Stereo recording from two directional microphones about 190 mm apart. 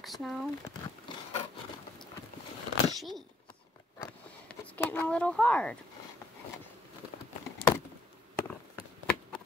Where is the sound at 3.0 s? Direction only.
Centre (ahead or behind).